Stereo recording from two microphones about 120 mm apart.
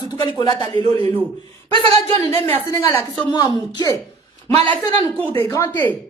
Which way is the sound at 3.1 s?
35° left (ahead or behind).